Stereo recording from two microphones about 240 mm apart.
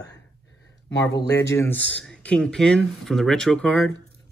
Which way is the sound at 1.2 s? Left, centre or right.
Left.